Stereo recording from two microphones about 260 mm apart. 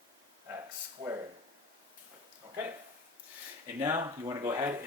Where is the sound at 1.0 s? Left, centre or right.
Right.